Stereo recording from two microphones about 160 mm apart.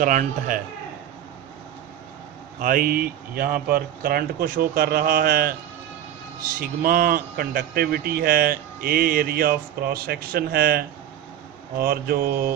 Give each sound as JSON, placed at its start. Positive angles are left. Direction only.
{"t": 0.0, "sound": "speech", "side_deg": -55}
{"t": 2.6, "sound": "speech", "side_deg": -65}
{"t": 6.6, "sound": "speech", "side_deg": -65}